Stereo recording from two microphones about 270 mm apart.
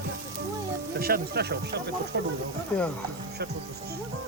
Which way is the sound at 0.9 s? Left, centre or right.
Right.